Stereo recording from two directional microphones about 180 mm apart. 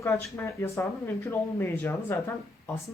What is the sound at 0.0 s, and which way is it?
Speech, 15° left (ahead or behind).